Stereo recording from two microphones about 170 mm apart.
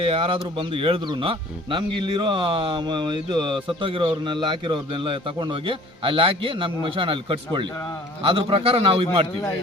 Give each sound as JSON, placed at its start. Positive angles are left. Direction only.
{"t": 0.0, "sound": "a man's voice", "side_deg": -30}